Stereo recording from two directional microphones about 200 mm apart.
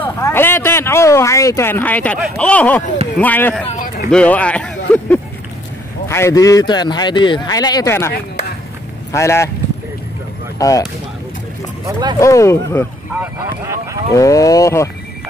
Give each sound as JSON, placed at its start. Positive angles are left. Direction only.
{"t": 0.0, "sound": "speech", "side_deg": 10}
{"t": 3.6, "sound": "a sound", "side_deg": 35}
{"t": 4.1, "sound": "a sound", "side_deg": 5}
{"t": 6.0, "sound": "a man's voice", "side_deg": 15}
{"t": 9.1, "sound": "speech", "side_deg": 15}
{"t": 10.6, "sound": "speech", "side_deg": 15}
{"t": 11.8, "sound": "speech", "side_deg": -20}
{"t": 12.2, "sound": "speech", "side_deg": 15}
{"t": 13.2, "sound": "speech", "side_deg": -10}
{"t": 14.1, "sound": "speech", "side_deg": 15}